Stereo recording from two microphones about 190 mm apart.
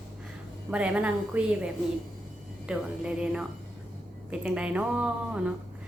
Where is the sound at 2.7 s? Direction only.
5° right (ahead or behind).